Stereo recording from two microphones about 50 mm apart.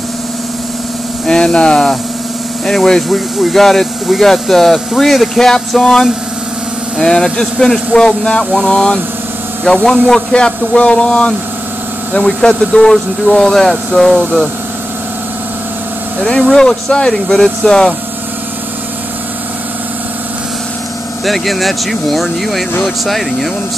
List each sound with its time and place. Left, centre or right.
1.2 s speech: centre
2.6 s speech: centre
16.3 s speech: centre
21.3 s speech: centre